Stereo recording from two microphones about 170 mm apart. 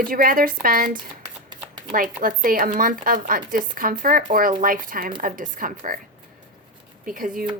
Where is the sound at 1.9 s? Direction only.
55° right (ahead or behind).